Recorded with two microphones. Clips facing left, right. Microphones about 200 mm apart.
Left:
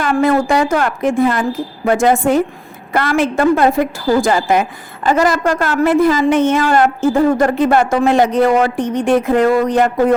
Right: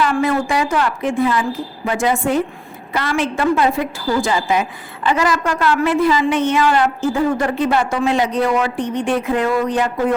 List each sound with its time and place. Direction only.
0.0 s a woman's voice: 45° left (ahead or behind)